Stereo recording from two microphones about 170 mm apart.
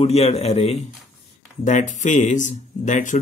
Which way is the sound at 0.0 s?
40° left (ahead or behind).